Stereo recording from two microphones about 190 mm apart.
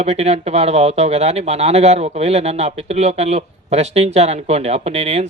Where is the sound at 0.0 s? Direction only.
35° right (ahead or behind).